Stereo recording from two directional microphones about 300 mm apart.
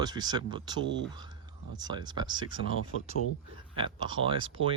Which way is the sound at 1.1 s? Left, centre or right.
Centre.